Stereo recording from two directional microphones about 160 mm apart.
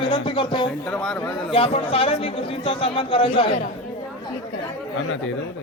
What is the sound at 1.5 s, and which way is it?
A man's voice, 35° left (ahead or behind).